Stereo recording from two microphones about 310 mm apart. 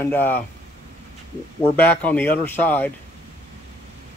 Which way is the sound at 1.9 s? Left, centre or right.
Centre.